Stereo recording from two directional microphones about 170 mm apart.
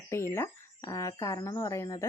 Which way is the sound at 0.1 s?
15° left (ahead or behind).